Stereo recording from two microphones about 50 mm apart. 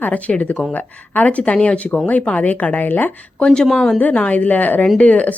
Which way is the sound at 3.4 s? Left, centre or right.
Centre.